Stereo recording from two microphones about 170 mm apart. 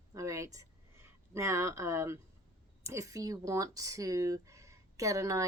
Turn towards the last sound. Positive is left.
turn(degrees=-20)  # may be behind; listen again after turning